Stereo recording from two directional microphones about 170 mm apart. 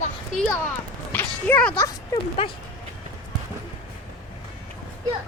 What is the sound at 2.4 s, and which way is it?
Speech, 35° left (ahead or behind).